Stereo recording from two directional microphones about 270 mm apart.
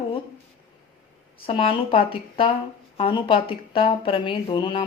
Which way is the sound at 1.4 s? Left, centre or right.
Centre.